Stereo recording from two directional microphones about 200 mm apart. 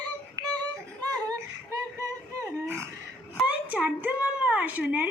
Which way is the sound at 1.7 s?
15° right (ahead or behind).